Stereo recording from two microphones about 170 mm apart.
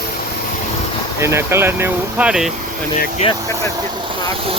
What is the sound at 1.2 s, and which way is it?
Speech, 15° right (ahead or behind).